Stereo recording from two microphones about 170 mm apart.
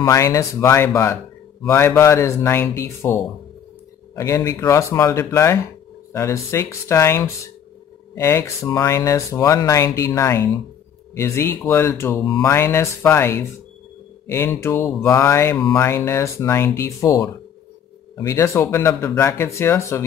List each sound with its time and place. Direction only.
0.0 s speech: 20° left (ahead or behind)
4.1 s speech: 20° left (ahead or behind)